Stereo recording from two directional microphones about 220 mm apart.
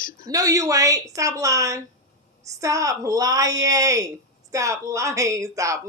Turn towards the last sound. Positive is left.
turn(degrees=-15)  # may be behind; listen again after turning